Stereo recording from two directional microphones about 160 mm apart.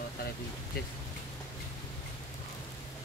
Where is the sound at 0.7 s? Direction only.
70° left (ahead or behind).